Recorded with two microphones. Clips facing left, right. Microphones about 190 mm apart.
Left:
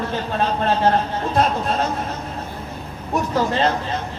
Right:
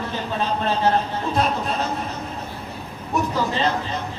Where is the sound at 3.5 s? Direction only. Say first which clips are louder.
Left 3 dB; 55° left (ahead or behind).